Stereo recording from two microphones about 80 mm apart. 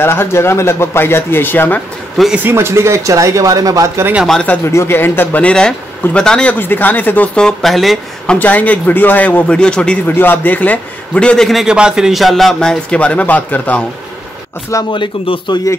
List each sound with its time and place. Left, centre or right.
0.0 s speech: left
2.2 s speech: centre
2.5 s speech: right
4.6 s speech: left
5.4 s speech: centre
6.6 s speech: left
7.3 s speech: centre
8.3 s speech: centre
10.0 s speech: left
11.4 s a man's voice: centre; by 13.8 s left
14.9 s speech: left